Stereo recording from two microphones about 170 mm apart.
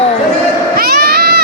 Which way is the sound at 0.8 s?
65° right (ahead or behind).